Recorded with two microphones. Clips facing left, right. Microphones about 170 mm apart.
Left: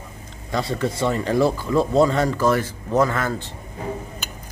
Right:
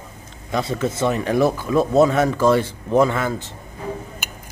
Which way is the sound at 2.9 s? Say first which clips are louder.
Right 3 dB; 15° right (ahead or behind).